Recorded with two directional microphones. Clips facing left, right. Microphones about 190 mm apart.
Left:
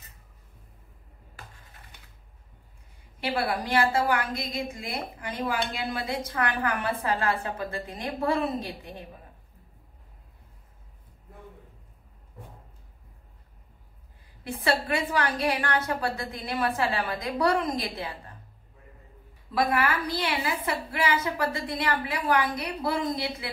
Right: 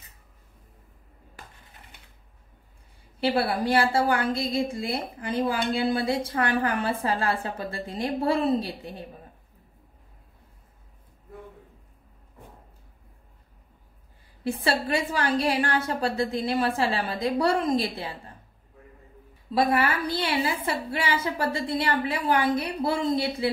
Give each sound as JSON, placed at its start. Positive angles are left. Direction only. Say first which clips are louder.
{"t": 3.2, "sound": "a woman's voice", "louder": "right 4 dB", "side_deg": -30}
{"t": 14.4, "sound": "a woman's voice", "louder": "right 1 dB", "side_deg": -30}
{"t": 19.5, "sound": "a woman's voice", "louder": "right 2 dB", "side_deg": -30}